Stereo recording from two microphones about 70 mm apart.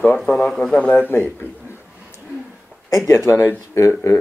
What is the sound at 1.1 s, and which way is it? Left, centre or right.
Speech, left.